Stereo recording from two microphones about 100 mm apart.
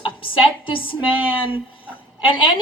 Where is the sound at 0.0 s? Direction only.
60° left (ahead or behind).